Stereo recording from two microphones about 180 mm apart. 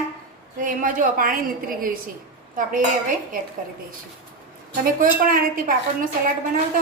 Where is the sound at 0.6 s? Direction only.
50° right (ahead or behind).